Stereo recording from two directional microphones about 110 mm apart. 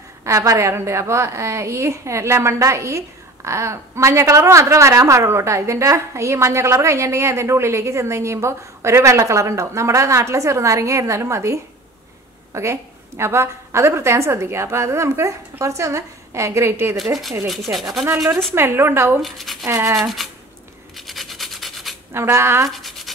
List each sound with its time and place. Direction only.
0.2 s a woman's voice: 30° right (ahead or behind)
17.5 s speech: centre (ahead or behind)
18.5 s a woman's voice: 20° right (ahead or behind)
19.2 s speech: centre (ahead or behind)
19.6 s a woman's voice: 25° right (ahead or behind)
20.0 s speech: centre (ahead or behind)
20.9 s rub: centre (ahead or behind)
22.1 s a woman's voice: 25° right (ahead or behind)
22.7 s a sound: centre (ahead or behind)